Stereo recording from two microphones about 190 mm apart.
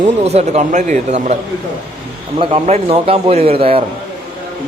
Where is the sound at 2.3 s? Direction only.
30° right (ahead or behind).